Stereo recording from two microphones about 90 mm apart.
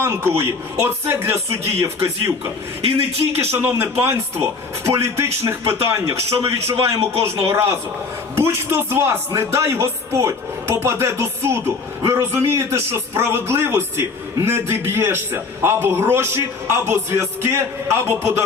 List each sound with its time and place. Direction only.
0.0 s a man's voice: 30° right (ahead or behind)
3.3 s a man's voice: 25° right (ahead or behind)